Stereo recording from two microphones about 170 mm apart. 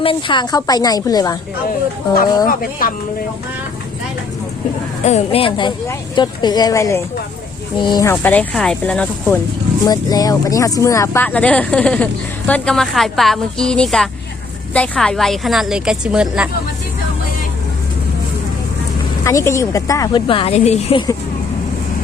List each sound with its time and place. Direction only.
0.0 s a woman's voice: 30° left (ahead or behind)
2.5 s speech: 55° left (ahead or behind)
5.0 s a woman's voice: 40° left (ahead or behind)
8.0 s speech: 10° left (ahead or behind)
9.8 s a woman's voice: 20° left (ahead or behind); by 16.5 s 5° right (ahead or behind)
19.2 s a woman's voice: 20° left (ahead or behind); by 21.0 s 40° left (ahead or behind)